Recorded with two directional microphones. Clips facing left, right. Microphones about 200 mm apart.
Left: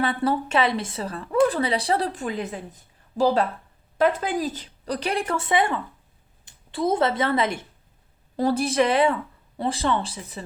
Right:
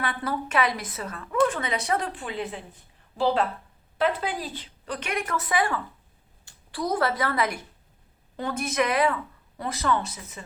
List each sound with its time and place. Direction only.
0.0 s a woman's voice: 30° left (ahead or behind)